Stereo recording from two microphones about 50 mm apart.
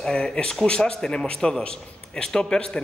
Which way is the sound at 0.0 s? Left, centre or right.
Centre.